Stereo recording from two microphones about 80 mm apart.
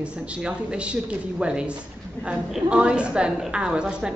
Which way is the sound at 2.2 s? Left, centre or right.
Left.